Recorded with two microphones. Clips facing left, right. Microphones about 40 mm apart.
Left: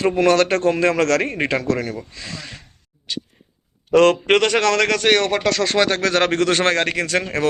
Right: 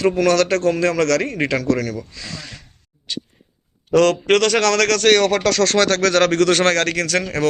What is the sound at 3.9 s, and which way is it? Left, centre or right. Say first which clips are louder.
A man's voice: left 1 dB; left.